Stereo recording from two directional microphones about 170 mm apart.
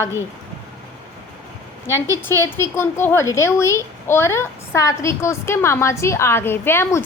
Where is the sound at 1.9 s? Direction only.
15° left (ahead or behind).